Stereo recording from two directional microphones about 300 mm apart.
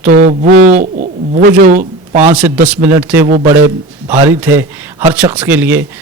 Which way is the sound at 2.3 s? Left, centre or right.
Centre.